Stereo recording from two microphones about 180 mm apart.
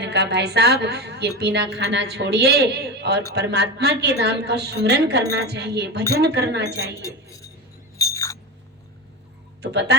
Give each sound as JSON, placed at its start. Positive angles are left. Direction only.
{"t": 0.0, "sound": "a woman's voice", "side_deg": -70}
{"t": 7.0, "sound": "speech", "side_deg": 15}
{"t": 7.9, "sound": "a sound", "side_deg": 20}
{"t": 9.6, "sound": "speech", "side_deg": -65}